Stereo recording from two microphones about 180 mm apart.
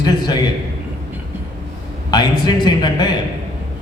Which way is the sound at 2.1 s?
25° left (ahead or behind).